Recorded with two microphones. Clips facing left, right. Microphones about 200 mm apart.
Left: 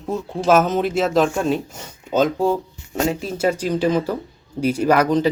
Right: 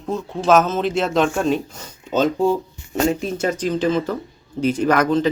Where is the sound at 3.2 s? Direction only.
10° left (ahead or behind).